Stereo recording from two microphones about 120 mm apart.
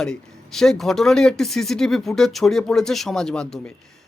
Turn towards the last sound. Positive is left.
turn(degrees=5)  # may be behind; listen again after turning